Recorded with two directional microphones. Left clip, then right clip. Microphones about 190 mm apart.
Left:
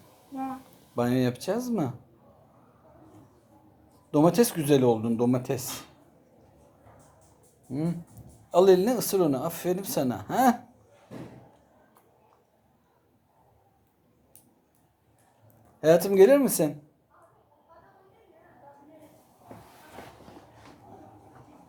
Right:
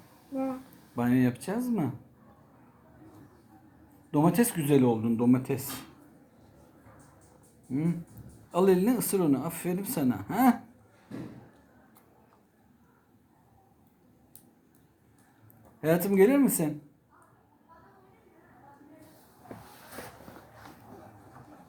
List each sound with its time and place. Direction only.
0.9 s speech: 30° left (ahead or behind)
4.1 s speech: 30° left (ahead or behind)
7.7 s speech: 35° left (ahead or behind)
15.9 s speech: 35° left (ahead or behind)